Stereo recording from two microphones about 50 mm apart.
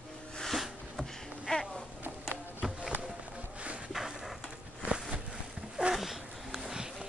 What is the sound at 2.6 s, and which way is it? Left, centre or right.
Music, centre.